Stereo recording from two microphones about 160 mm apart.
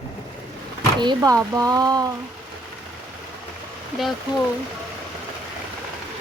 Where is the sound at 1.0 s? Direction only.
25° right (ahead or behind).